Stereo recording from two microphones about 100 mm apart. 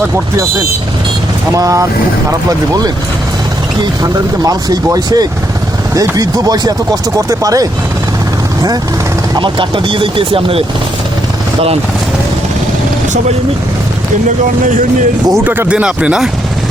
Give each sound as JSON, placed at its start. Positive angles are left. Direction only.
{"t": 1.5, "sound": "speech", "side_deg": -35}
{"t": 9.3, "sound": "speech", "side_deg": -55}
{"t": 15.4, "sound": "speech", "side_deg": -15}